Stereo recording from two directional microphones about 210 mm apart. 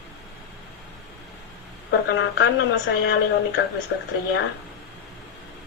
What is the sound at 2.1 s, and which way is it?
Speech, 60° left (ahead or behind).